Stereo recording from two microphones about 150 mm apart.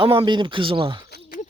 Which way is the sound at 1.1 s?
75° left (ahead or behind).